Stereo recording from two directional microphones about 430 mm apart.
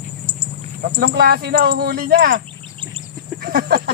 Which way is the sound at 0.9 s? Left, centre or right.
Right.